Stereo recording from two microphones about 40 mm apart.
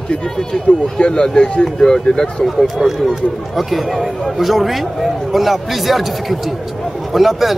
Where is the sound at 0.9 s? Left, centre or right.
Left.